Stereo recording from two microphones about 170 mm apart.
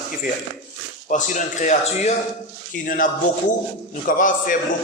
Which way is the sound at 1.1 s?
45° left (ahead or behind).